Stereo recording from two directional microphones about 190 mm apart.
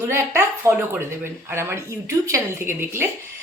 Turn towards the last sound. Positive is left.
turn(degrees=-10)  # may be behind; listen again after turning